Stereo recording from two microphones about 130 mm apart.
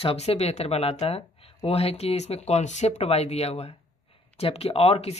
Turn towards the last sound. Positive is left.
turn(degrees=50)  # may be behind; listen again after turning